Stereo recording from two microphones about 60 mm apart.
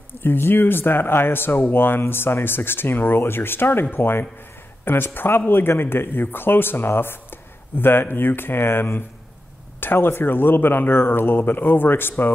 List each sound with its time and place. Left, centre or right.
0.2 s speech: left